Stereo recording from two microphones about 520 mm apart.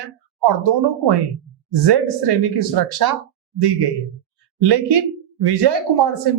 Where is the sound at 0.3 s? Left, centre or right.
Right.